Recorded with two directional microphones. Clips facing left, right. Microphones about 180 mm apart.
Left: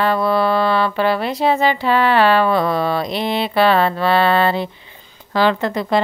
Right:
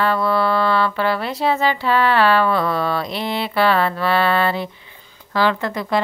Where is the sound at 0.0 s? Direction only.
15° left (ahead or behind).